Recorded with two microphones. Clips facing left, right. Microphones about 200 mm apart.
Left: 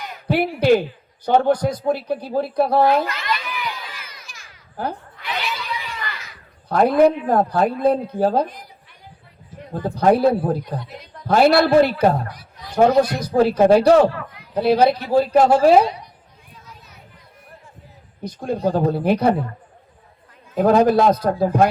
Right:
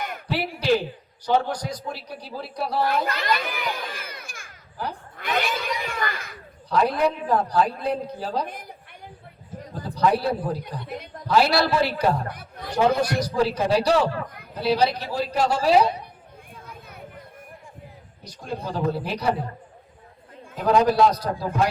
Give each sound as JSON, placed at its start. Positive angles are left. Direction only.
{"t": 0.3, "sound": "a woman's voice", "side_deg": 55}
{"t": 3.1, "sound": "crowd", "side_deg": -35}
{"t": 5.1, "sound": "a sound", "side_deg": -50}
{"t": 6.7, "sound": "a woman's voice", "side_deg": 55}
{"t": 9.7, "sound": "a woman's voice", "side_deg": 55}
{"t": 10.8, "sound": "a sound", "side_deg": -55}
{"t": 11.3, "sound": "a woman's voice", "side_deg": 55}
{"t": 12.3, "sound": "speech", "side_deg": -55}
{"t": 13.2, "sound": "a woman's voice", "side_deg": 55}
{"t": 16.6, "sound": "chatter", "side_deg": -55}
{"t": 18.2, "sound": "a woman's voice", "side_deg": 55}
{"t": 20.6, "sound": "a woman's voice", "side_deg": 50}